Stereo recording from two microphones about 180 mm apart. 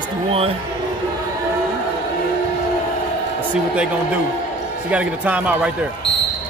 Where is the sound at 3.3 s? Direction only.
5° right (ahead or behind).